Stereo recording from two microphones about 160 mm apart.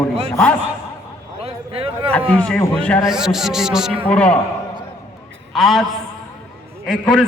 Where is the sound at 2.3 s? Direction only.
5° left (ahead or behind).